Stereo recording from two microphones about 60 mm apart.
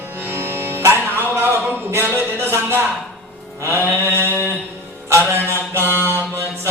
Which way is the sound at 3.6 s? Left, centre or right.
Right.